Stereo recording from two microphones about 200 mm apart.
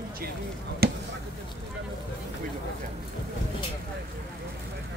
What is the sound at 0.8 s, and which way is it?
Basketball bounce, 50° right (ahead or behind).